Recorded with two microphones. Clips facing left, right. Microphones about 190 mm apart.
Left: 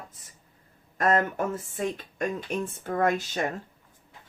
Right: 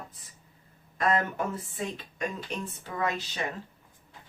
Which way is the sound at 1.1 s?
45° left (ahead or behind).